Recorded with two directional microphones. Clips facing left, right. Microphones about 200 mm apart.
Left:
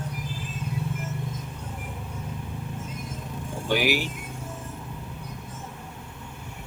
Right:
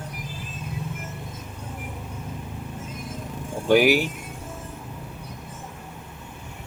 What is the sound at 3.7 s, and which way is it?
Speech, 50° right (ahead or behind).